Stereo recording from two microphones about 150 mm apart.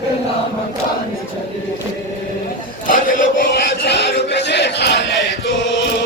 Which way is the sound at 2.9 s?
65° left (ahead or behind).